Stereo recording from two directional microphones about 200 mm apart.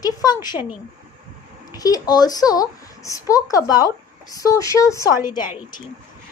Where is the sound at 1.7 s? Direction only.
20° left (ahead or behind).